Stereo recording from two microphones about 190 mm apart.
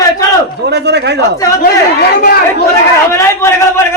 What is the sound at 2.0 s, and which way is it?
Speech, 55° left (ahead or behind).